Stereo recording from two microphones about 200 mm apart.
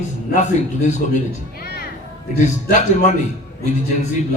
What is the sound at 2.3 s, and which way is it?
Speech, 35° left (ahead or behind).